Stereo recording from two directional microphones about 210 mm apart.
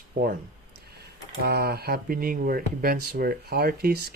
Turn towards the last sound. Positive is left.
turn(degrees=-50)  # may be behind; listen again after turning